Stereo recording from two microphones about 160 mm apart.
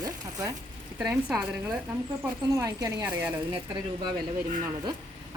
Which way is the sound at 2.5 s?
20° right (ahead or behind).